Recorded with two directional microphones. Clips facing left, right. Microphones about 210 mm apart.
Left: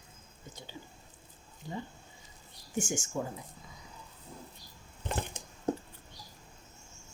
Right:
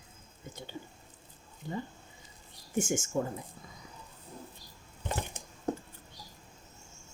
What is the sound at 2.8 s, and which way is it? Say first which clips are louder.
Speech: right 3 dB; 55° right (ahead or behind).